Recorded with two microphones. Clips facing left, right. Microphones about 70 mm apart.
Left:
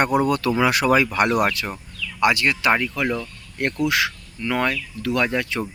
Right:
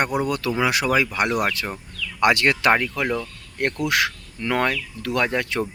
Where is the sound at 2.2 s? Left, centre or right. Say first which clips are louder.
Right 1 dB; right.